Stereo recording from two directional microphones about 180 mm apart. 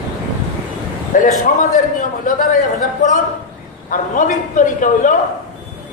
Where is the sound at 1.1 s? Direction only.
45° left (ahead or behind).